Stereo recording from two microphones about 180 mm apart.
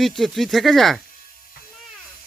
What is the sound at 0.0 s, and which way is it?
Speech, centre (ahead or behind).